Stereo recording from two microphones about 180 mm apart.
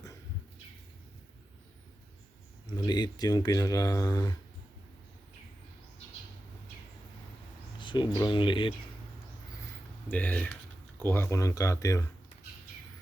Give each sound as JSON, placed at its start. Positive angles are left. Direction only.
{"t": 2.7, "sound": "speech", "side_deg": 20}
{"t": 7.8, "sound": "speech", "side_deg": 25}
{"t": 10.1, "sound": "speech", "side_deg": 10}